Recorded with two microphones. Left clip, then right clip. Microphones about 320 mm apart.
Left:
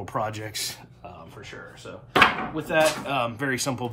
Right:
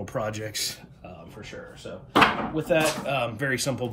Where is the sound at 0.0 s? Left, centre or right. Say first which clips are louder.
Left 1 dB; centre.